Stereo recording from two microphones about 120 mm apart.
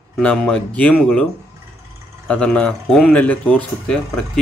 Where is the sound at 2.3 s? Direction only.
10° left (ahead or behind).